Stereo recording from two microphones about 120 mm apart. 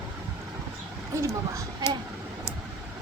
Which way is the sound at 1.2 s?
25° right (ahead or behind).